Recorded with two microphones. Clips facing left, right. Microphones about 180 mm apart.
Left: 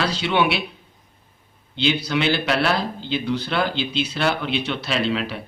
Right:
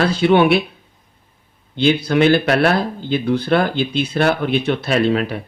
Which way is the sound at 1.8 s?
50° right (ahead or behind).